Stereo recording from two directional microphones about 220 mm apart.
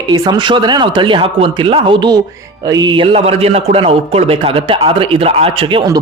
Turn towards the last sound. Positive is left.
turn(degrees=-20)  # may be behind; listen again after turning